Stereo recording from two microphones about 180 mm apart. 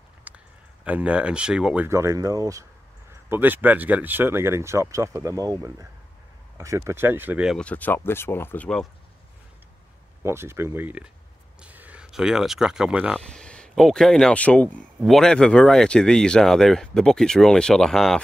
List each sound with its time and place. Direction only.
0.3 s a sound: 10° right (ahead or behind)
0.8 s speech: 5° right (ahead or behind)
1.9 s speech: 15° right (ahead or behind)
6.6 s speech: 15° right (ahead or behind)
7.5 s speech: 10° left (ahead or behind)
10.2 s speech: 15° right (ahead or behind)
13.3 s speech: 5° left (ahead or behind)